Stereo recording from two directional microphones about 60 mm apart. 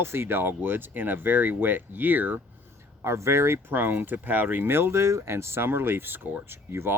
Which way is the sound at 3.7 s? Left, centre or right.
Right.